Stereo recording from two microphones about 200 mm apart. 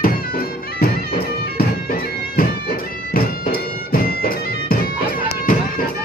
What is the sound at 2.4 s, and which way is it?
Bagpipes, 45° left (ahead or behind).